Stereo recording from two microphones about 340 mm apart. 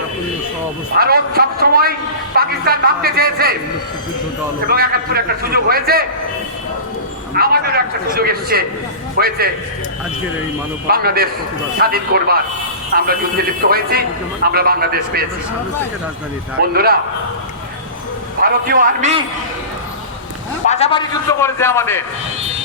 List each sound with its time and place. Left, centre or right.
0.9 s a man's voice: right
4.7 s a man's voice: right
7.3 s a man's voice: right
10.8 s a man's voice: right
16.6 s a man's voice: right
18.3 s a man's voice: right
20.7 s a man's voice: centre